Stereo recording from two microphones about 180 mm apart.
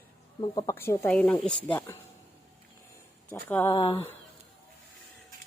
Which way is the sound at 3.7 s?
25° left (ahead or behind).